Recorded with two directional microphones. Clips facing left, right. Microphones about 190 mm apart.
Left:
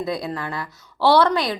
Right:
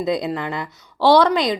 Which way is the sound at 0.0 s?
20° right (ahead or behind).